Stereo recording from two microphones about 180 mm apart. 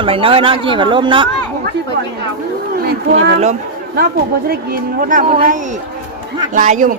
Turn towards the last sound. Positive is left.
turn(degrees=-45)  # may be behind; listen again after turning